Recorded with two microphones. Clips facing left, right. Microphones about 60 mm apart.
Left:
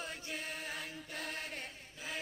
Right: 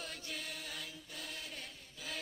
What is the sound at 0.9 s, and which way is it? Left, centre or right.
Chant, left.